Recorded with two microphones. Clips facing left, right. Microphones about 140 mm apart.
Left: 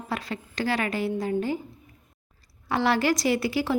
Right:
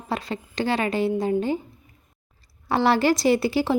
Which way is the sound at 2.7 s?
30° right (ahead or behind).